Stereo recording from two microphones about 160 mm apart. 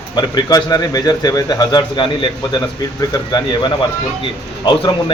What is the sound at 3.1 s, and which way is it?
Speech, 25° left (ahead or behind).